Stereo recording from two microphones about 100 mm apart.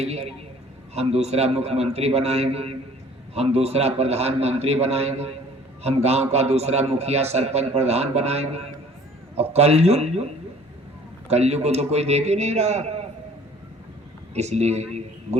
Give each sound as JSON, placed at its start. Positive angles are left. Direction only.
{"t": 0.0, "sound": "a man's voice", "side_deg": -90}
{"t": 11.3, "sound": "a man's voice", "side_deg": -90}
{"t": 14.3, "sound": "speech", "side_deg": -90}